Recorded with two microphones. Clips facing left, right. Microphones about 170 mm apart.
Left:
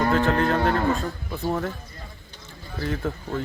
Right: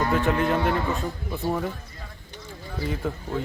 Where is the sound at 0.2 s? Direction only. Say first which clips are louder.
Left 2 dB; 55° left (ahead or behind).